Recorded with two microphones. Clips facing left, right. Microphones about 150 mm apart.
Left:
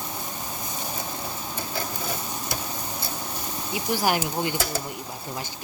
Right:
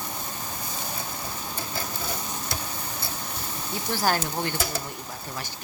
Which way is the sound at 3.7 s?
15° left (ahead or behind).